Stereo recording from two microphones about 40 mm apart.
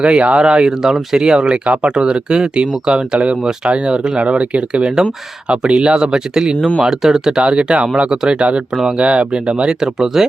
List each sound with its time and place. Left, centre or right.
0.0 s speech: right; by 7.4 s centre
7.4 s speech: right